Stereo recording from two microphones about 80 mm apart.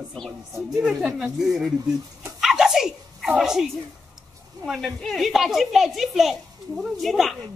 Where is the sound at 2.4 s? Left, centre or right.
Centre.